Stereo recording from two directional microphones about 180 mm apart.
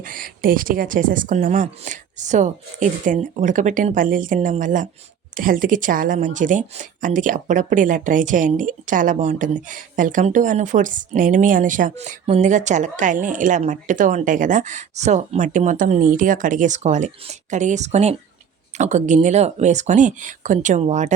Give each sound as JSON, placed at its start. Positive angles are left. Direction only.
{"t": 0.0, "sound": "a woman's voice", "side_deg": -50}